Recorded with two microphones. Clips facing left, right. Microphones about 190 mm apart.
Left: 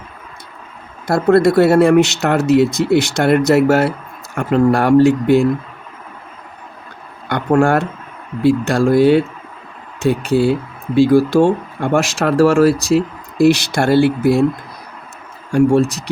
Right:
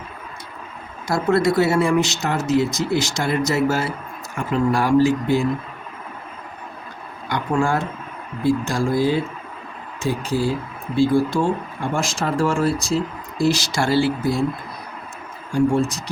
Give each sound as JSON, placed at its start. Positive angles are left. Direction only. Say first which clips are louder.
{"t": 1.0, "sound": "speech", "louder": "left 6 dB", "side_deg": 60}
{"t": 7.3, "sound": "speech", "louder": "left 7 dB", "side_deg": 65}
{"t": 15.5, "sound": "speech", "louder": "left 6 dB", "side_deg": 70}